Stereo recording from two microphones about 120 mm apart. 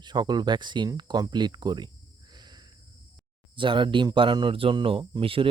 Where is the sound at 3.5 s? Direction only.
45° right (ahead or behind).